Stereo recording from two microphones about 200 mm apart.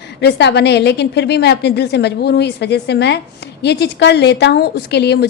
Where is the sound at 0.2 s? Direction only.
55° left (ahead or behind).